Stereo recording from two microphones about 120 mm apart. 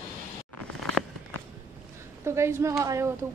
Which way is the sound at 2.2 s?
20° right (ahead or behind).